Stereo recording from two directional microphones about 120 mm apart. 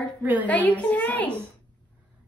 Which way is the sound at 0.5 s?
10° left (ahead or behind).